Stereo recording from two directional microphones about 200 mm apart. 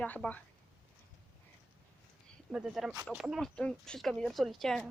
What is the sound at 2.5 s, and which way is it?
Speech, 5° right (ahead or behind).